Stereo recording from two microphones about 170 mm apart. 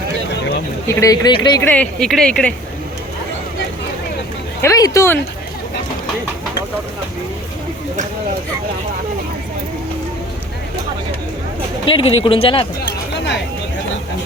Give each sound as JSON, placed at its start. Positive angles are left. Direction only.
{"t": 0.9, "sound": "speech", "side_deg": 20}
{"t": 1.6, "sound": "speech", "side_deg": 10}
{"t": 4.6, "sound": "speech", "side_deg": 20}
{"t": 11.9, "sound": "speech", "side_deg": 35}
{"t": 13.1, "sound": "a sound", "side_deg": 90}